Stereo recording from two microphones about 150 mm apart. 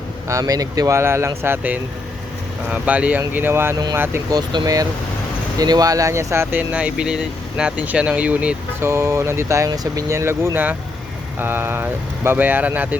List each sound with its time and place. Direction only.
0.3 s speech: 20° right (ahead or behind)
4.4 s speech: 25° right (ahead or behind); by 13.0 s 10° right (ahead or behind)